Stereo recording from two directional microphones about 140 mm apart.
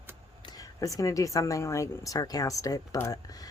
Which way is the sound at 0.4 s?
25° left (ahead or behind).